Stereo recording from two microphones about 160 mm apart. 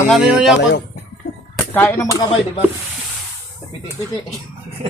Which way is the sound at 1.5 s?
10° left (ahead or behind).